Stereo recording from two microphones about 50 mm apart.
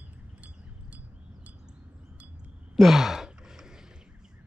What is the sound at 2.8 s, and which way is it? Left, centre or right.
Sigh, centre.